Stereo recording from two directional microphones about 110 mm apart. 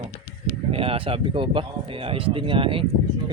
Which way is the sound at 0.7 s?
60° right (ahead or behind).